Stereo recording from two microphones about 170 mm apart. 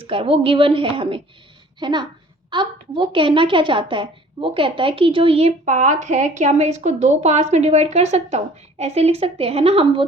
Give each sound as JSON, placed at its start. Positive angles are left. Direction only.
{"t": 0.0, "sound": "a woman's voice", "side_deg": -35}